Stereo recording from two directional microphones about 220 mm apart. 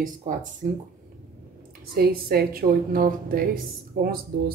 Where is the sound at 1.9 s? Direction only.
45° right (ahead or behind).